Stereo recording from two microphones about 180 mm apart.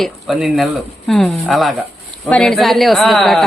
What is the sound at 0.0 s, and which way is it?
Speech, centre (ahead or behind).